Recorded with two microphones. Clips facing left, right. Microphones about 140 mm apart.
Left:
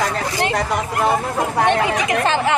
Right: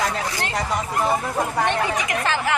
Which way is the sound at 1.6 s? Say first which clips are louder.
Left 6 dB; 75° left (ahead or behind).